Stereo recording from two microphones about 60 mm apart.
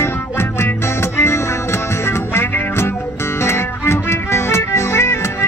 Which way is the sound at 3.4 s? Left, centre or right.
Left.